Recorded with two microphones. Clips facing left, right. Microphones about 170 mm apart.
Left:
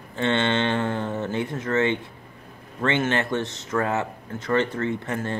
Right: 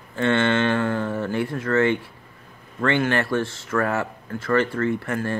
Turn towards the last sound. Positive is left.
turn(degrees=20)  # may be behind; listen again after turning